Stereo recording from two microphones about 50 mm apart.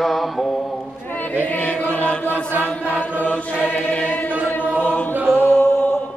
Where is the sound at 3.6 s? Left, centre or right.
Left.